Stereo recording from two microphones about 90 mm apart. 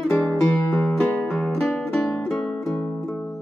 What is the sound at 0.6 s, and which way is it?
Music, 5° left (ahead or behind).